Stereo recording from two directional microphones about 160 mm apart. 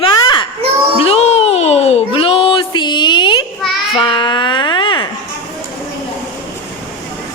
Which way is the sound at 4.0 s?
30° left (ahead or behind).